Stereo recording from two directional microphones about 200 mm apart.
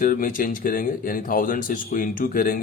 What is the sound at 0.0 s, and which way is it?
Speech, 45° left (ahead or behind).